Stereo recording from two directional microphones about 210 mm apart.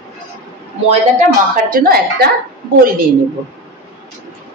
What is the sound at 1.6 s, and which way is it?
Speech, 45° right (ahead or behind).